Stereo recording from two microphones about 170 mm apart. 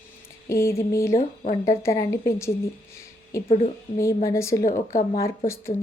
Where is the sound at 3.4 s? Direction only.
40° left (ahead or behind).